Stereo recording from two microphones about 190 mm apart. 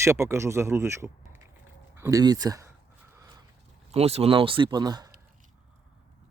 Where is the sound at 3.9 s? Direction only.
30° right (ahead or behind).